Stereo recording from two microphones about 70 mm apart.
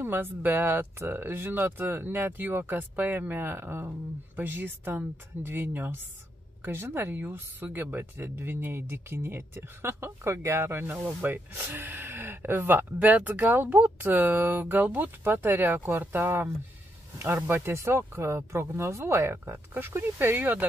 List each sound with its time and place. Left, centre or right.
0.0 s speech: right